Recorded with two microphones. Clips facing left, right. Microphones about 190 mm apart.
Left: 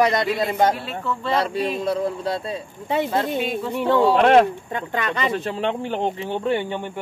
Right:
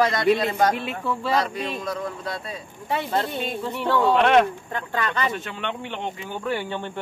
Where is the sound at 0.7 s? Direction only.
15° right (ahead or behind).